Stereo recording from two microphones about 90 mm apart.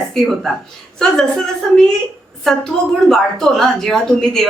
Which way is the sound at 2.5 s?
Centre (ahead or behind).